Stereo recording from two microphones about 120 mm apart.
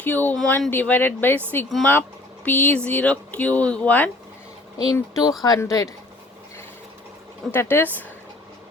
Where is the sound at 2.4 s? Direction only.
15° left (ahead or behind).